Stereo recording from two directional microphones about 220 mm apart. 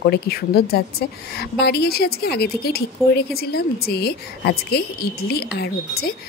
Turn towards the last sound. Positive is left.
turn(degrees=45)  # may be behind; listen again after turning